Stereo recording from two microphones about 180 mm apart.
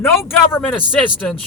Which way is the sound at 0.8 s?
Centre (ahead or behind).